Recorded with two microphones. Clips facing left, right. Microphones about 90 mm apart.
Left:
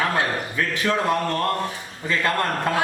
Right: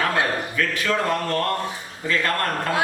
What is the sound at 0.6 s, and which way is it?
Speech, 20° left (ahead or behind).